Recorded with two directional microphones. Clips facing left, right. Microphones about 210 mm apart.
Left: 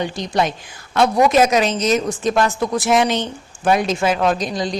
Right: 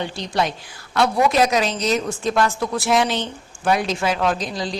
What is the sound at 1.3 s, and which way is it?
A woman's voice, 20° left (ahead or behind).